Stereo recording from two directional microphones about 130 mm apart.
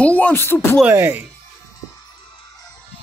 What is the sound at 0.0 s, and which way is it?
Speech, 10° left (ahead or behind).